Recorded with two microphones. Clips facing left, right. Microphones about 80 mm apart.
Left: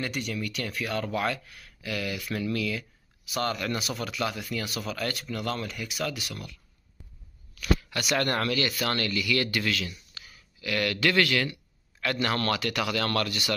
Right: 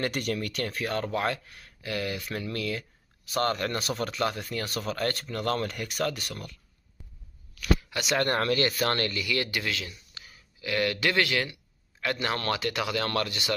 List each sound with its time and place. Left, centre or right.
0.0 s speech: right
2.5 s speech: right
7.9 s speech: right